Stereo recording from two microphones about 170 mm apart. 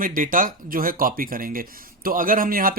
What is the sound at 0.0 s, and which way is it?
Speech, 55° right (ahead or behind).